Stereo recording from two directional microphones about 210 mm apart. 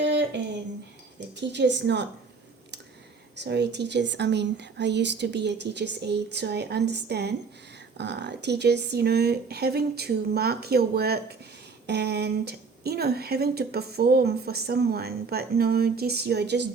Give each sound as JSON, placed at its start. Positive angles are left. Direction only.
{"t": 0.0, "sound": "a sound", "side_deg": -55}
{"t": 1.4, "sound": "speech", "side_deg": -55}
{"t": 3.3, "sound": "a woman's voice", "side_deg": -55}